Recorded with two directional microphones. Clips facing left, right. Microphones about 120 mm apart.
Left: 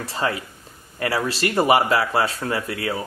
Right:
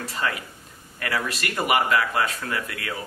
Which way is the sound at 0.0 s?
30° left (ahead or behind).